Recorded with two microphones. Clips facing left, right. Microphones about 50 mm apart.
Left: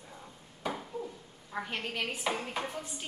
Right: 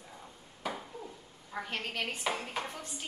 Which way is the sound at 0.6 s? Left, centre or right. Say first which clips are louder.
Left 3 dB; centre.